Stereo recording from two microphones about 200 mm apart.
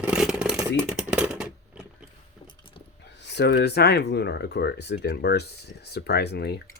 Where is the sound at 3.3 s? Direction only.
55° left (ahead or behind).